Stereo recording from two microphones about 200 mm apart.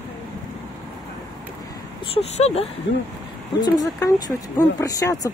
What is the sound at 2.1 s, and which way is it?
Speech, 30° left (ahead or behind).